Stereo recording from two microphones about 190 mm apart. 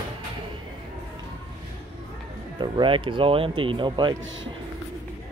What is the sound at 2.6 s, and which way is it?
Speech, 25° right (ahead or behind).